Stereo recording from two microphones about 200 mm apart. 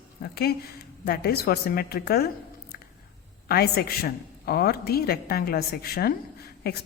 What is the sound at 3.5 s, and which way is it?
A woman's voice, 50° left (ahead or behind).